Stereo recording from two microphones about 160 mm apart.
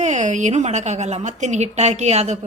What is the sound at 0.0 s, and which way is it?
A woman's voice, 45° right (ahead or behind).